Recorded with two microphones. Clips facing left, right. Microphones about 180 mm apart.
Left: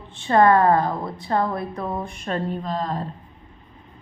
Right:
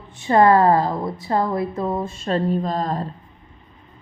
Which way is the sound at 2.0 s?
25° right (ahead or behind).